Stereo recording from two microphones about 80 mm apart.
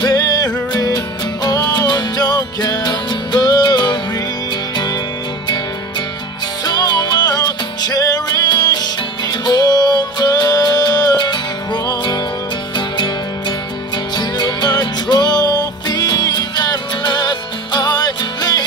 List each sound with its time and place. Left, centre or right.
0.0 s music: left
6.6 s music: left
12.7 s music: left
14.1 s music: left